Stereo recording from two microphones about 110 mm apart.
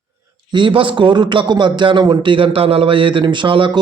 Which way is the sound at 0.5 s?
50° right (ahead or behind).